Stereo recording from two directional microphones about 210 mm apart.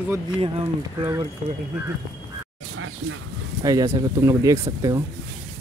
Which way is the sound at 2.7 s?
70° right (ahead or behind).